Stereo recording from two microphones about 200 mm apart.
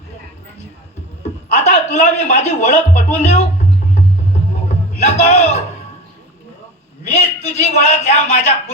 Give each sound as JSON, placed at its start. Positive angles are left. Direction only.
{"t": 1.5, "sound": "speech", "side_deg": 35}
{"t": 5.0, "sound": "a man's voice", "side_deg": 35}
{"t": 7.1, "sound": "a man's voice", "side_deg": 35}